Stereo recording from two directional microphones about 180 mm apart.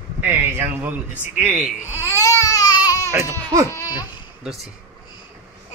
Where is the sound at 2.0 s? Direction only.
15° left (ahead or behind).